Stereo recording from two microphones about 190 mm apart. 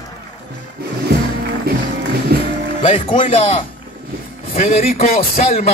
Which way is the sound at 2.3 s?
55° right (ahead or behind).